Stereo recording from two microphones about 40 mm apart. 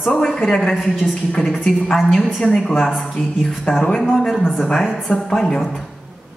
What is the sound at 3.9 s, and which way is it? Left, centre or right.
Speech, centre.